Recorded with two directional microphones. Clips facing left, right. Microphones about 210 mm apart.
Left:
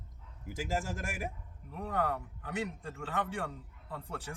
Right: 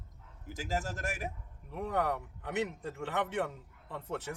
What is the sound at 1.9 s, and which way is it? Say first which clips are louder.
A man's voice: right 1 dB; 20° right (ahead or behind).